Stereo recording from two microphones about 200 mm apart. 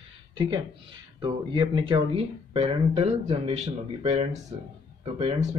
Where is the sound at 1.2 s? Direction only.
25° right (ahead or behind).